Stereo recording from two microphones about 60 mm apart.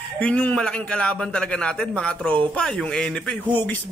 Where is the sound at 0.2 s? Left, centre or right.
Left.